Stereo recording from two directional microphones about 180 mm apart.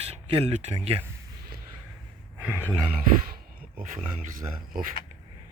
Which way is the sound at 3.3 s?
55° right (ahead or behind).